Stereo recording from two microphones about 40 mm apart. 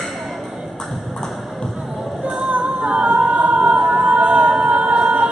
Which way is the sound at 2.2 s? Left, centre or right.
Right.